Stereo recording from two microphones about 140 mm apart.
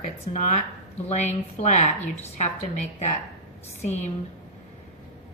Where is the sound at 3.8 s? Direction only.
55° left (ahead or behind).